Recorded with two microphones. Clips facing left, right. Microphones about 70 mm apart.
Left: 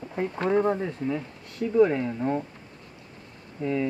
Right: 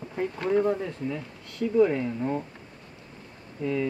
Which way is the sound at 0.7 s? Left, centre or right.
Centre.